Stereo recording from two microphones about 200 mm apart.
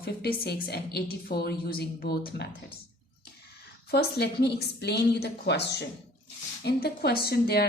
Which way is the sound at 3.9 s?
55° left (ahead or behind).